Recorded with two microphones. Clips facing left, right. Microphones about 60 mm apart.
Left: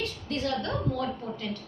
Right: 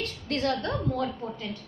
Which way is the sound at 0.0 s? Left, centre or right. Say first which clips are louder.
Right 2 dB; right.